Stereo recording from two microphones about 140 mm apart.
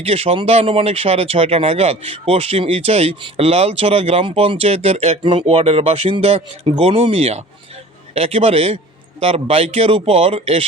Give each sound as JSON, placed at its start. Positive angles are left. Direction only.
{"t": 0.0, "sound": "speech", "side_deg": -45}
{"t": 5.2, "sound": "speech", "side_deg": -35}